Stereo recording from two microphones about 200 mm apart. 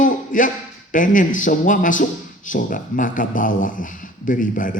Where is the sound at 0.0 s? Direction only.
40° left (ahead or behind).